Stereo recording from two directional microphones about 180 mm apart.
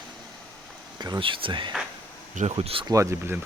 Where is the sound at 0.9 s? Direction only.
25° right (ahead or behind).